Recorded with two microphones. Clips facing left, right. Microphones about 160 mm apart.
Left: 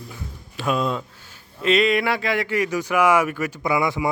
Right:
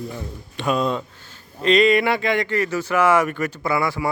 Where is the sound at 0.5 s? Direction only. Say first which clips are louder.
Right 2 dB; centre (ahead or behind).